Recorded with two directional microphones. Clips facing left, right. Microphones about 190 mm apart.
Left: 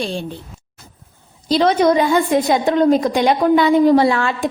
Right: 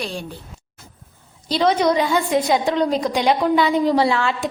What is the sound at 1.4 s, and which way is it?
A woman's voice, 45° left (ahead or behind).